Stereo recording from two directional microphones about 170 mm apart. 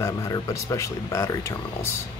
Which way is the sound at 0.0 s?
20° left (ahead or behind).